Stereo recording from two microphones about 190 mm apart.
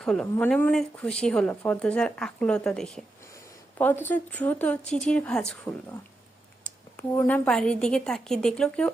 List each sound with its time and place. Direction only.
0.0 s speech: 5° left (ahead or behind)
7.1 s speech: 10° left (ahead or behind)